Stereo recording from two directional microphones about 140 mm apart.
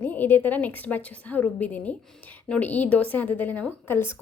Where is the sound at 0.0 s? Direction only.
15° left (ahead or behind).